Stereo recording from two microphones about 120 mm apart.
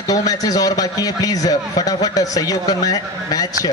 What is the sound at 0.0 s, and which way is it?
A man's voice, 30° left (ahead or behind).